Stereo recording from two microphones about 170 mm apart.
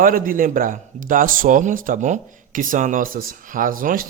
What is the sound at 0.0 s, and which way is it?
Speech, 55° right (ahead or behind).